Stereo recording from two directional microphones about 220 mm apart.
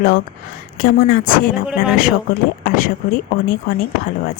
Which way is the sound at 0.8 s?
40° left (ahead or behind).